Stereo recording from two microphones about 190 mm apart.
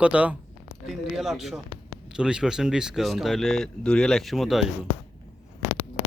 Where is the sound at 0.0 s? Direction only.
5° right (ahead or behind).